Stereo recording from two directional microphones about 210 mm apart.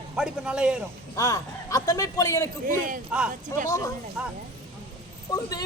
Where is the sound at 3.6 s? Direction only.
15° left (ahead or behind).